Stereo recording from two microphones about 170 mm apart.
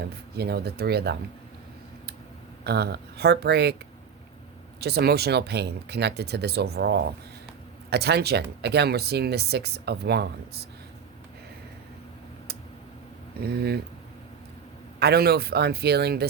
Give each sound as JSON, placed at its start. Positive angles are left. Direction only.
{"t": 0.3, "sound": "speech", "side_deg": -70}
{"t": 2.6, "sound": "speech", "side_deg": -70}
{"t": 4.8, "sound": "speech", "side_deg": -70}
{"t": 13.4, "sound": "speech", "side_deg": -65}
{"t": 14.9, "sound": "speech", "side_deg": -70}